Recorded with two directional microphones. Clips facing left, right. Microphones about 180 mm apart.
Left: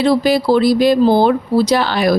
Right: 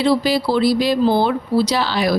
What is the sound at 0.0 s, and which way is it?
A woman's voice, 50° left (ahead or behind).